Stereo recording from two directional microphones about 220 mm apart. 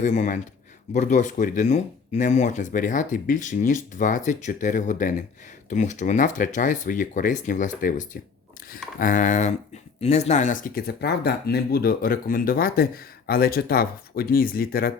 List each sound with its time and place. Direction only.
0.0 s speech: 35° left (ahead or behind)